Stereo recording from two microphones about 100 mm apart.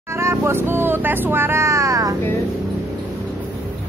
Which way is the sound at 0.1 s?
25° right (ahead or behind).